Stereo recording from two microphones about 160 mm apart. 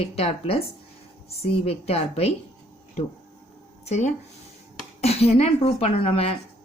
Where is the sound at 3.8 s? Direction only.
45° left (ahead or behind).